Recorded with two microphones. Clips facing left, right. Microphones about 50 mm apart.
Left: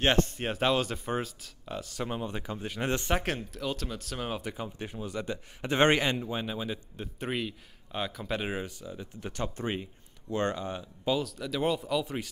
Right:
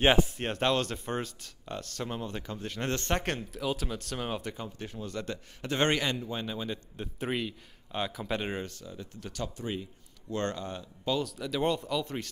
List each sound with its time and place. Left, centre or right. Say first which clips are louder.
0.0 s speech: right 2 dB; centre
9.3 s speech: left 2 dB; left
10.3 s speech: left 2 dB; centre
11.2 s speech: even; centre